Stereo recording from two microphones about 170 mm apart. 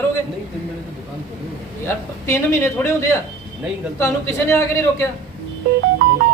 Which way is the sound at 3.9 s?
15° left (ahead or behind).